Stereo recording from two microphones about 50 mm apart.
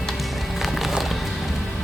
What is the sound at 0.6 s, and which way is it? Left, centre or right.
Music, centre.